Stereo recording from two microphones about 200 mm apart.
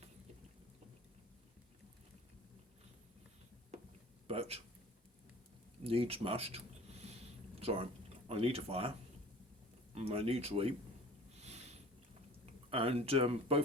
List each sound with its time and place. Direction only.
4.3 s speech: 30° right (ahead or behind)
5.8 s a sound: 30° right (ahead or behind)
8.3 s speech: 30° right (ahead or behind)
9.9 s speech: 30° right (ahead or behind)
11.3 s sniff: 35° right (ahead or behind)
12.7 s speech: 30° right (ahead or behind)